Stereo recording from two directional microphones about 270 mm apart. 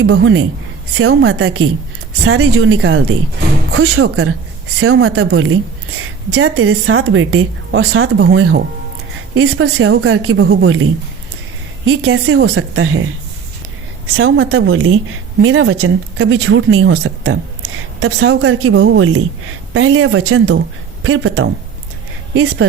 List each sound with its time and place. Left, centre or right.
0.0 s a woman's voice: right
11.9 s a woman's voice: right
14.1 s a woman's voice: right